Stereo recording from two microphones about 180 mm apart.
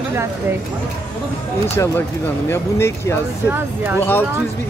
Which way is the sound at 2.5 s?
15° left (ahead or behind).